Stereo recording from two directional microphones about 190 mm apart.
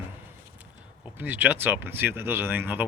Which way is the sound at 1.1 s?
10° right (ahead or behind).